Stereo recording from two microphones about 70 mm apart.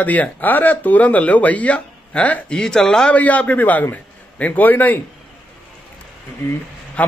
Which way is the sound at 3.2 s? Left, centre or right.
Left.